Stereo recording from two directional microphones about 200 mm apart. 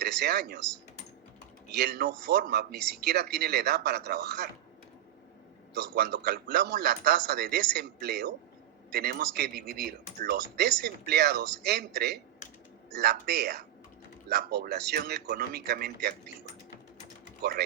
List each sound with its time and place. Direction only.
0.0 s speech: 50° right (ahead or behind)
1.6 s speech: 55° right (ahead or behind)
5.7 s speech: 55° right (ahead or behind)